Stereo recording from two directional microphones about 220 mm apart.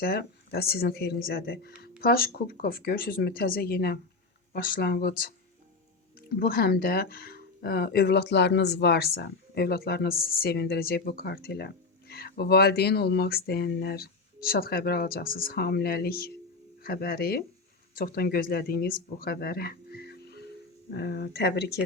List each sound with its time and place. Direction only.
0.0 s speech: 45° left (ahead or behind)
19.2 s music: 45° left (ahead or behind)
20.9 s speech: 50° left (ahead or behind)